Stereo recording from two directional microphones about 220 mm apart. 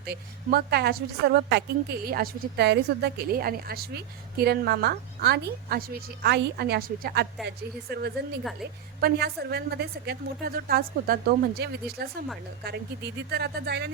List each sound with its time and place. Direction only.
0.0 s a woman's voice: 45° right (ahead or behind)